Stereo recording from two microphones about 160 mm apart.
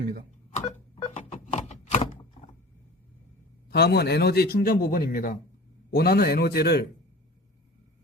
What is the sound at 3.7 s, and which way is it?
A man's voice, 90° left.